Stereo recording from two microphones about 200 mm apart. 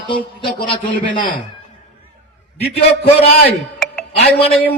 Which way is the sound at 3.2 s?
30° left (ahead or behind).